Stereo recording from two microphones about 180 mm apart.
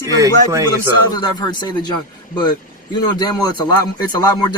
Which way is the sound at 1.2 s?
25° left (ahead or behind).